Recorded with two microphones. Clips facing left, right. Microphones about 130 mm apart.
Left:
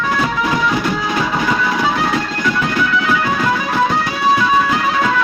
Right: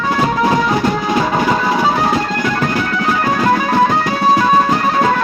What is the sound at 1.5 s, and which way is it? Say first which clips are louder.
Music: right 3 dB; 35° right (ahead or behind).